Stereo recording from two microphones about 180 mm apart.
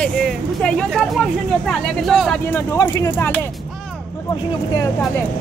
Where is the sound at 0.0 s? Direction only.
5° left (ahead or behind).